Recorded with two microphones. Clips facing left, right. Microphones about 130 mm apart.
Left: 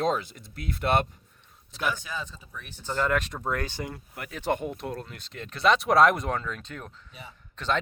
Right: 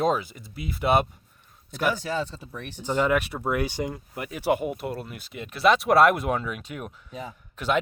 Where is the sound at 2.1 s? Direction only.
70° right (ahead or behind).